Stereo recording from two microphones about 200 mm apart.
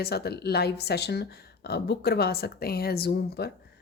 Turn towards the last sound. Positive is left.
turn(degrees=50)  # may be behind; listen again after turning